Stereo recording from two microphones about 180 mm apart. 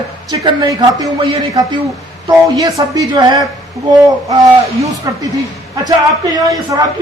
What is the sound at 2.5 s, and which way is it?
Speech, 20° right (ahead or behind).